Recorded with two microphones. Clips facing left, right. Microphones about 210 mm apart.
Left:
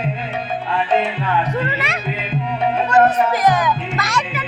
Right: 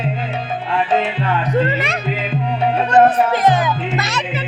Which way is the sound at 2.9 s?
30° right (ahead or behind).